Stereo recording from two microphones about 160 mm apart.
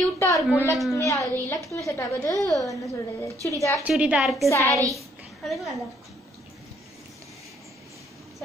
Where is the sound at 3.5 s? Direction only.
20° left (ahead or behind).